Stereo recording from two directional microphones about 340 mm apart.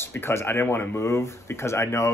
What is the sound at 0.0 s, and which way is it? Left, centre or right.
Speech, centre.